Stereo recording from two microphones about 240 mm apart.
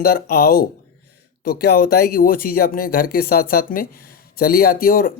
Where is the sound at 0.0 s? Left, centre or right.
Left.